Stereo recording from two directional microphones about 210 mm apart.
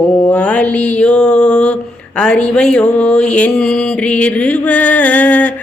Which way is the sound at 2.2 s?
5° left (ahead or behind).